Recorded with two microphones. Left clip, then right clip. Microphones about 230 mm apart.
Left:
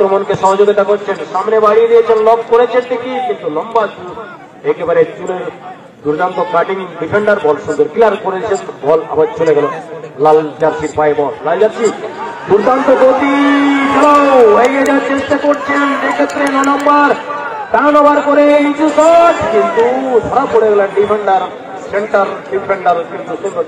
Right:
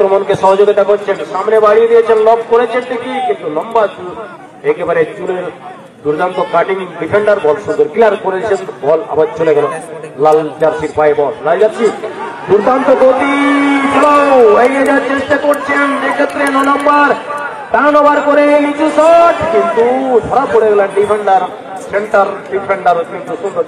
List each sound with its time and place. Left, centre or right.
0.0 s a man's voice: right
6.1 s a man's voice: right